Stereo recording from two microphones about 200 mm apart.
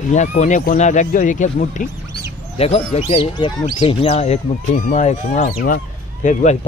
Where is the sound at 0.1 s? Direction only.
35° left (ahead or behind).